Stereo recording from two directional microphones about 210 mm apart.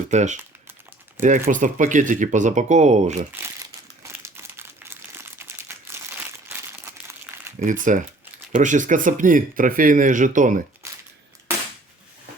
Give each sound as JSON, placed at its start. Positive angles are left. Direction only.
{"t": 0.1, "sound": "speech", "side_deg": -35}
{"t": 1.5, "sound": "speech", "side_deg": -40}
{"t": 4.0, "sound": "crumpling", "side_deg": -10}
{"t": 7.6, "sound": "speech", "side_deg": -35}
{"t": 10.8, "sound": "a sound", "side_deg": -15}